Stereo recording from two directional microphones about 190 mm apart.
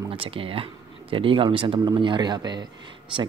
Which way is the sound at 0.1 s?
30° right (ahead or behind).